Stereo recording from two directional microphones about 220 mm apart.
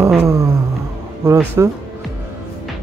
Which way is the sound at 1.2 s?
10° right (ahead or behind).